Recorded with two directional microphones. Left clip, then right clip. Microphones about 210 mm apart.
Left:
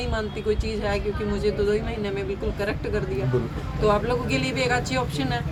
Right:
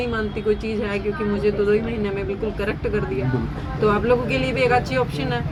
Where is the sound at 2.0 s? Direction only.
20° left (ahead or behind).